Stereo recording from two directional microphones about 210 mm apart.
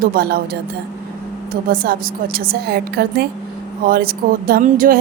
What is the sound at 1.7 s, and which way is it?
A woman's voice, 45° right (ahead or behind).